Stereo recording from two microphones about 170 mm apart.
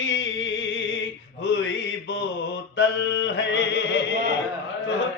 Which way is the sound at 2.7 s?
90° left.